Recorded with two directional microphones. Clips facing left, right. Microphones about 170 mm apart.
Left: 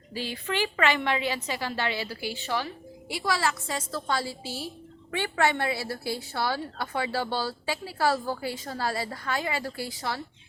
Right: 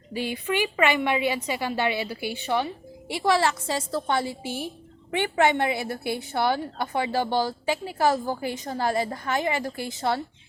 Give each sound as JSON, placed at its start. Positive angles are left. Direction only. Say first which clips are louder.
{"t": 0.3, "sound": "a woman's voice", "louder": "right 3 dB", "side_deg": -15}